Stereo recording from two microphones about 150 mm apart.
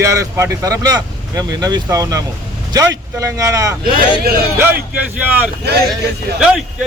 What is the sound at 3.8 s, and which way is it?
Speech, 90° right.